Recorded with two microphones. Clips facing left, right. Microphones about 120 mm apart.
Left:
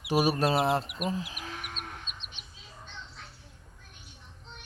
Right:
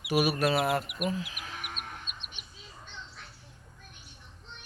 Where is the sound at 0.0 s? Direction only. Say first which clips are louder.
Left 1 dB; 30° left (ahead or behind).